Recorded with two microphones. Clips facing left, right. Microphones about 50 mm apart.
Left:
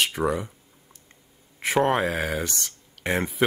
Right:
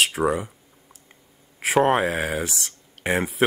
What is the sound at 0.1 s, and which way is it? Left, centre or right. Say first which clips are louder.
Speech: right 2 dB; centre.